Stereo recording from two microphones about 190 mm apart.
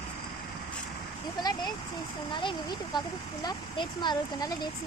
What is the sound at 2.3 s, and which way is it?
Speech, 25° left (ahead or behind).